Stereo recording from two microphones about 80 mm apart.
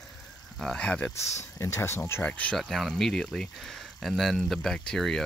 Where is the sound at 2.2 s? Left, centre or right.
Centre.